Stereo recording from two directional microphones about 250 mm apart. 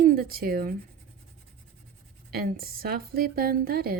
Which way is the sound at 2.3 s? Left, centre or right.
Right.